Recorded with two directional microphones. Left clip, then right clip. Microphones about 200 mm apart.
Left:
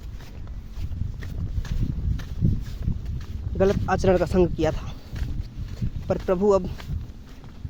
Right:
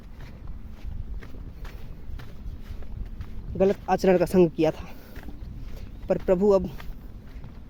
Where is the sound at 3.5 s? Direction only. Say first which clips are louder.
Left 1 dB; 20° right (ahead or behind).